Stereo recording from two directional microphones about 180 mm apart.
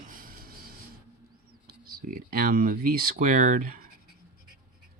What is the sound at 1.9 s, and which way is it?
Speech, 50° right (ahead or behind).